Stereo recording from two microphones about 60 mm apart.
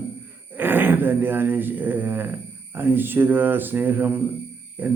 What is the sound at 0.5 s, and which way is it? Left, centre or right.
Speech, right.